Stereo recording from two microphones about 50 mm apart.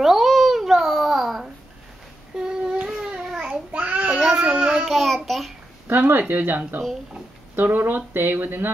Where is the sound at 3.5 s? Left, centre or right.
Right.